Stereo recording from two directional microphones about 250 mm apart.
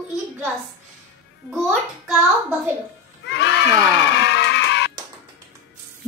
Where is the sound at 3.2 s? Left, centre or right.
Left.